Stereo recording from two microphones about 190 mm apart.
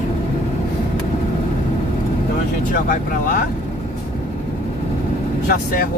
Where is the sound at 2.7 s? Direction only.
45° left (ahead or behind).